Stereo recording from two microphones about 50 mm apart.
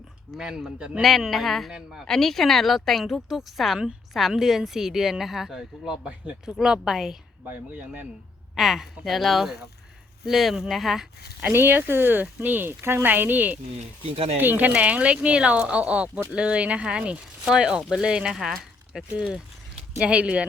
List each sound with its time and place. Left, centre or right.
0.3 s a woman's voice: centre
1.0 s a woman's voice: centre
2.0 s a woman's voice: centre
8.5 s a woman's voice: centre
11.5 s speech: right
14.8 s a woman's voice: right; by 19.0 s centre
20.0 s speech: right